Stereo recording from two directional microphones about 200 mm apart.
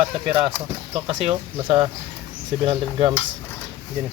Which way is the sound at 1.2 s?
25° right (ahead or behind).